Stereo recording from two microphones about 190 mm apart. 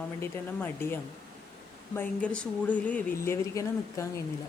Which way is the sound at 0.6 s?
10° left (ahead or behind).